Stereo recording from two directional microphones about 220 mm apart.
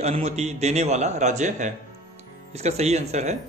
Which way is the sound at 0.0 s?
30° right (ahead or behind).